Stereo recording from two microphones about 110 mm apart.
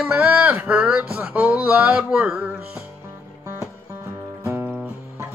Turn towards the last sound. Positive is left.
turn(degrees=-20)  # may be behind; listen again after turning